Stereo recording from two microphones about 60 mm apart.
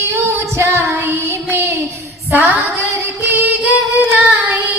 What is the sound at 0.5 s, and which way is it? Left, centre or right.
Child singing, right.